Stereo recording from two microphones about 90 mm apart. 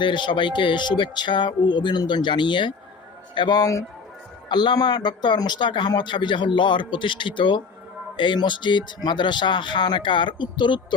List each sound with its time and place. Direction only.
0.0 s speech: 65° left (ahead or behind)
3.6 s a man's voice: 40° left (ahead or behind)
4.4 s speech: 55° left (ahead or behind)